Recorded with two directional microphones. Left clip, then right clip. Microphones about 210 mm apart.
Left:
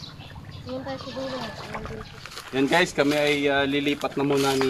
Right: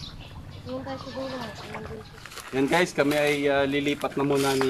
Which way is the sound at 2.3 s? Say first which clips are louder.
Left 2 dB; centre (ahead or behind).